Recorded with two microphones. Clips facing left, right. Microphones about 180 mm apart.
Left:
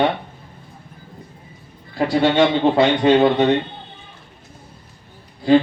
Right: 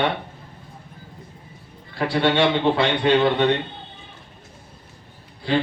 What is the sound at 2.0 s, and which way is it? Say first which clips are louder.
A man's voice: left 4 dB; 40° left (ahead or behind).